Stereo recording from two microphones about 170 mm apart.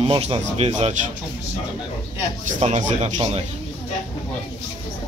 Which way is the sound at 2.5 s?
40° right (ahead or behind).